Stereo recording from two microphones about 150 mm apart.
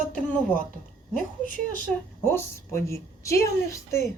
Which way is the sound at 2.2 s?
15° left (ahead or behind).